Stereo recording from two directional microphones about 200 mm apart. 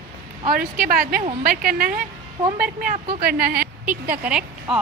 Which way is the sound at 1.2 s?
30° right (ahead or behind).